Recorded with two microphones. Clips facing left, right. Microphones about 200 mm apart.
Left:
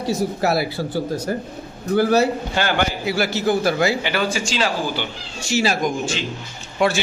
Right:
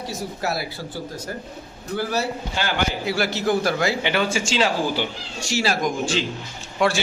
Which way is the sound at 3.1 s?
5° left (ahead or behind).